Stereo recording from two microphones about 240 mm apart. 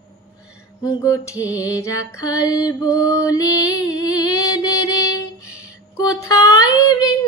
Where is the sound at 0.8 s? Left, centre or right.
Centre.